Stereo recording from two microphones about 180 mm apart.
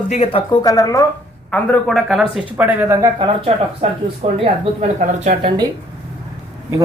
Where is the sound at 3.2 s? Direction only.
35° right (ahead or behind).